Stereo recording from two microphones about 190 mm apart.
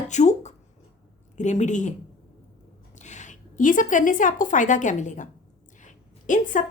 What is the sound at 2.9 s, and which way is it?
Speech, 40° left (ahead or behind).